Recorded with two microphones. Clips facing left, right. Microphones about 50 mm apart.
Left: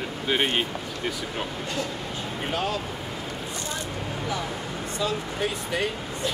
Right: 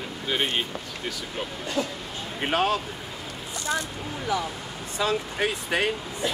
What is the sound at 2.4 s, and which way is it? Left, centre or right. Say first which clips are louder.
Speech: right 5 dB; right.